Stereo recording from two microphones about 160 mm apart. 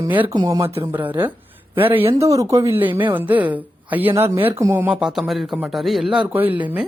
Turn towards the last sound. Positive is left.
turn(degrees=-10)  # may be behind; listen again after turning